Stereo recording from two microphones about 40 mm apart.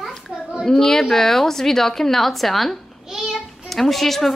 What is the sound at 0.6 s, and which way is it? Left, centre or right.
A woman's voice, centre.